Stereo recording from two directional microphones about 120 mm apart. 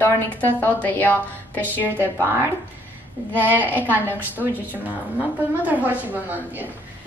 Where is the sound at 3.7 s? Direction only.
15° right (ahead or behind).